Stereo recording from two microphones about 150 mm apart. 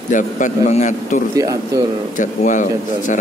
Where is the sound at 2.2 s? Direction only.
60° left (ahead or behind).